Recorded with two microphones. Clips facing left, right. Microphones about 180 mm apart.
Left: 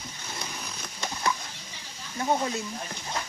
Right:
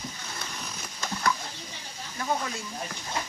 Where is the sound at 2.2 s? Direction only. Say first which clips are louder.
Left 4 dB; 25° left (ahead or behind).